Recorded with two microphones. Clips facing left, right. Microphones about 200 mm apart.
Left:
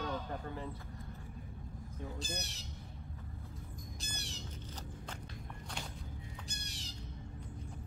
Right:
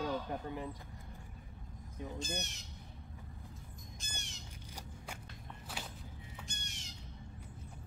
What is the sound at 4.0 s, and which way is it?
Bird, 35° left (ahead or behind).